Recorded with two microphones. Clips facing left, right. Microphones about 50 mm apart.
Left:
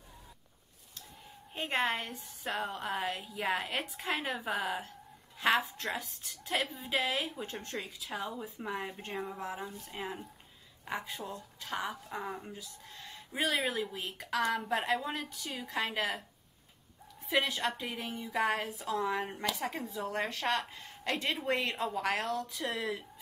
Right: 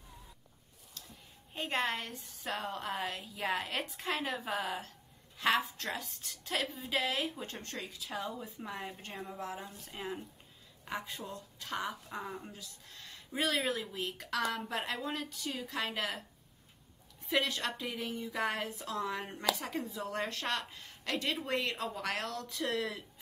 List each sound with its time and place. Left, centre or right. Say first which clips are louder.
1.5 s a woman's voice: left 2 dB; centre
9.8 s a woman's voice: left 1 dB; left
14.4 s a woman's voice: left 5 dB; left
17.3 s a woman's voice: left 2 dB; centre